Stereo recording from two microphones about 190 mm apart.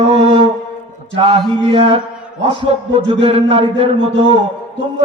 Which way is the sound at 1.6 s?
30° right (ahead or behind).